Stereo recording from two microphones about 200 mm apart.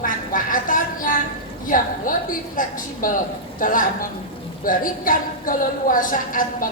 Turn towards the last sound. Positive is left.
turn(degrees=45)  # may be behind; listen again after turning